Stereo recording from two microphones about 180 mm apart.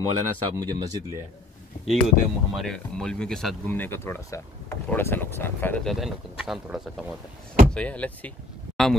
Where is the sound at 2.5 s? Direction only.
5° left (ahead or behind).